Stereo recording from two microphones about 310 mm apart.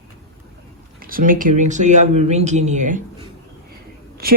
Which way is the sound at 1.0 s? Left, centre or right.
Right.